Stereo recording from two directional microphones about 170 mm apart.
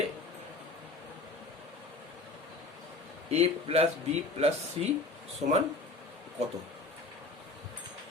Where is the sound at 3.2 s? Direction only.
35° right (ahead or behind).